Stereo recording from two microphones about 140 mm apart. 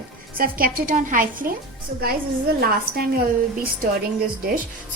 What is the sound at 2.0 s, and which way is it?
A woman's voice, 90° right.